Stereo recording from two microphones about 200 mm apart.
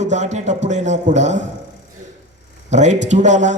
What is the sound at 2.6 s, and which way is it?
Speech, 35° right (ahead or behind).